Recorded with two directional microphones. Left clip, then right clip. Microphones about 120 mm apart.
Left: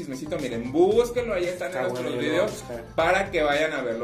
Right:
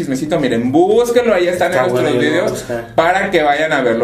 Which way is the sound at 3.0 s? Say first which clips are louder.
Right 9 dB; 35° right (ahead or behind).